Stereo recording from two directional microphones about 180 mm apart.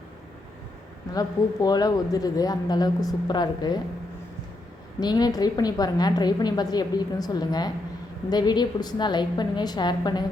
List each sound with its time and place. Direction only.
1.1 s a woman's voice: 20° left (ahead or behind)
4.9 s a woman's voice: 25° left (ahead or behind)